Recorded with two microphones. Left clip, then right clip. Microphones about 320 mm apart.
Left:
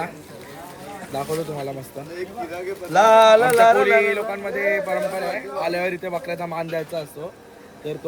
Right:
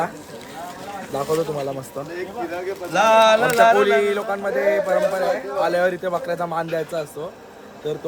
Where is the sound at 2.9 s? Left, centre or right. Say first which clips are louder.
Left 2 dB; left.